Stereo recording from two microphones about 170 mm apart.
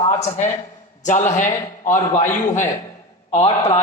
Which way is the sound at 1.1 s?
45° left (ahead or behind).